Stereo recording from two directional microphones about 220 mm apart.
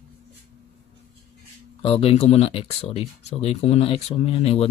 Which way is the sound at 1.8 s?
25° left (ahead or behind).